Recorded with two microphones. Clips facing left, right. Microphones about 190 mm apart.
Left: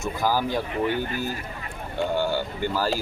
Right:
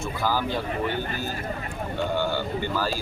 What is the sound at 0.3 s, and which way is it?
Speech, 15° left (ahead or behind).